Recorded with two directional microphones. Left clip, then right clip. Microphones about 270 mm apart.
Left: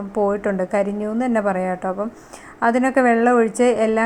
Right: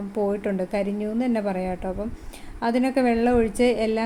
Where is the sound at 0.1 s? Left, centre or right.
Centre.